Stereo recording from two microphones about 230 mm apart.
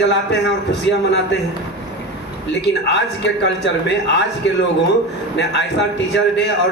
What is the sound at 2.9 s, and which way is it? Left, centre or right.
Speech, left.